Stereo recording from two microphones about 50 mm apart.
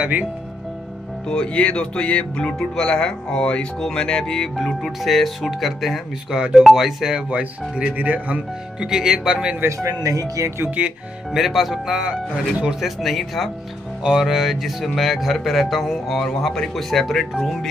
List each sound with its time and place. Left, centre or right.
1.3 s speech: left
3.8 s music: centre
4.6 s speech: centre
6.3 s speech: centre
8.0 s speech: right
8.7 s speech: centre
9.7 s speech: right
11.3 s speech: centre
12.8 s speech: centre